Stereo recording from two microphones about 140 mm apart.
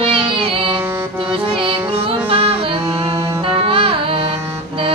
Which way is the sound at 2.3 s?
40° right (ahead or behind).